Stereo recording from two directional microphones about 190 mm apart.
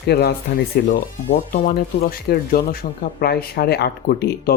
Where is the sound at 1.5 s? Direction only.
45° left (ahead or behind).